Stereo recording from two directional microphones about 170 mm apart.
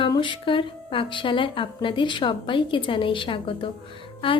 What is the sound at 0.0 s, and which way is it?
Speech, 30° left (ahead or behind).